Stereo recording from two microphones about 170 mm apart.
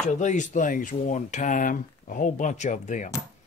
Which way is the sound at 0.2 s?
45° left (ahead or behind).